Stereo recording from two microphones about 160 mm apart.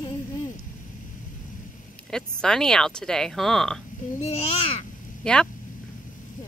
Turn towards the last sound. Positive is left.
turn(degrees=5)  # may be behind; listen again after turning